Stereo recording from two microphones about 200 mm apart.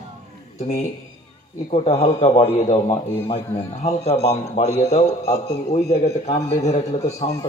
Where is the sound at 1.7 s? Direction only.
30° left (ahead or behind).